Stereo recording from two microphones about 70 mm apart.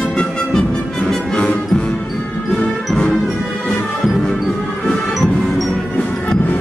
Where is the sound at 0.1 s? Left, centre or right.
Centre.